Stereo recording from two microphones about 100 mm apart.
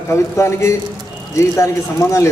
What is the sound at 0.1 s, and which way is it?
A man's voice, 30° left (ahead or behind).